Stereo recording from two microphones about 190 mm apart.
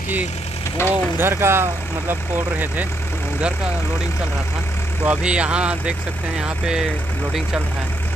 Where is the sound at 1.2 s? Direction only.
15° right (ahead or behind).